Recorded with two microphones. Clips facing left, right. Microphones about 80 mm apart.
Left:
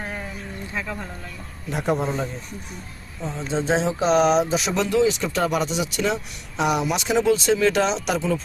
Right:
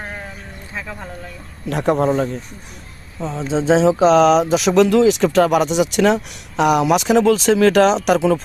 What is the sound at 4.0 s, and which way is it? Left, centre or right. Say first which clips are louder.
Speech: right 4 dB; right.